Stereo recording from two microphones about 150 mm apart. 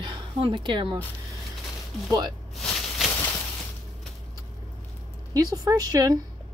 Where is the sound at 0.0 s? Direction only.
35° right (ahead or behind).